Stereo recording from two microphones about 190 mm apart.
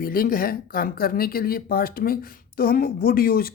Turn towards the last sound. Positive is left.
turn(degrees=50)  # may be behind; listen again after turning